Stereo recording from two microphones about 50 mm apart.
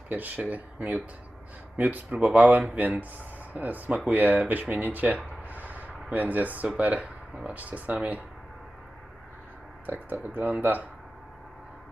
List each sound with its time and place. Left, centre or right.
0.1 s speech: right
9.8 s speech: right